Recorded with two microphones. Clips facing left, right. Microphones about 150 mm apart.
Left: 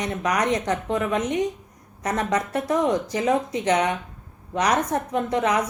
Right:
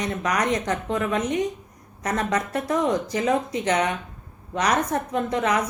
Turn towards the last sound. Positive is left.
turn(degrees=15)  # may be behind; listen again after turning